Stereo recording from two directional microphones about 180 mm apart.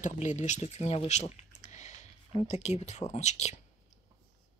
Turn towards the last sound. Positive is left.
turn(degrees=40)  # may be behind; listen again after turning